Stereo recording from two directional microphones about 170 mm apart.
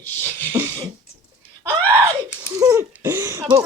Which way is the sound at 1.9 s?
10° right (ahead or behind).